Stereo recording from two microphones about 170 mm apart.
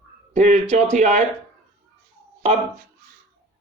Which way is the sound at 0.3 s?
45° right (ahead or behind).